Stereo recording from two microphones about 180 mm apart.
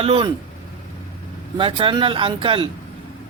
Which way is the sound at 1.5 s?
30° right (ahead or behind).